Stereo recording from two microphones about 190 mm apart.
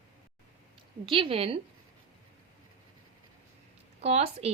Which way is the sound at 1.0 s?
30° right (ahead or behind).